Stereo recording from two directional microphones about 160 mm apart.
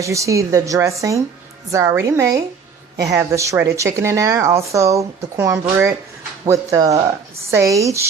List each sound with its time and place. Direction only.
0.0 s a woman's voice: 20° right (ahead or behind)